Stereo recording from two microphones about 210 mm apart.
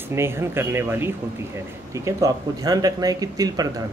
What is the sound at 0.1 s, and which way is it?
Speech, 10° right (ahead or behind).